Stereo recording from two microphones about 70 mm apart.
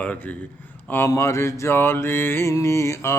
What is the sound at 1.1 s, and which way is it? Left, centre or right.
Mantra, left.